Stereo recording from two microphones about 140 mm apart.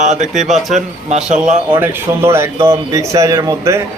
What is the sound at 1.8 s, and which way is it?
Speech, 15° right (ahead or behind).